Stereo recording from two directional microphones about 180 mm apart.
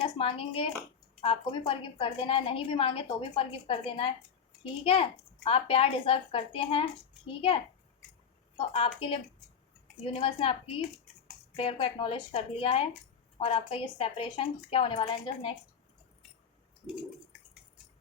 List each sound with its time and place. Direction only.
0.0 s a woman's voice: 30° left (ahead or behind)
8.5 s a woman's voice: 30° left (ahead or behind)